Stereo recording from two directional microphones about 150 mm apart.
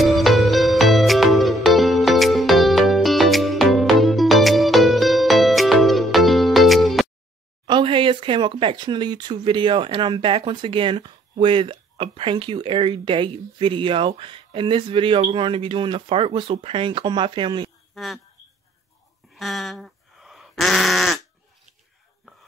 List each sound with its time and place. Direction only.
0.0 s music: centre (ahead or behind)
7.6 s speech: 30° right (ahead or behind)
17.9 s speech: centre (ahead or behind)
19.3 s a sound: centre (ahead or behind)